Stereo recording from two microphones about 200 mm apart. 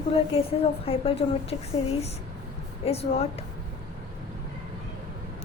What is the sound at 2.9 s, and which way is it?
Speech, 30° left (ahead or behind).